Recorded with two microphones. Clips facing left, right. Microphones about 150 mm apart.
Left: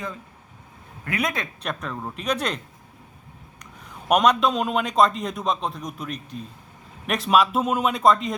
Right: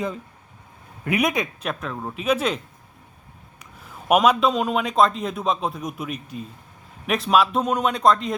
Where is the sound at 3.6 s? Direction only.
5° right (ahead or behind).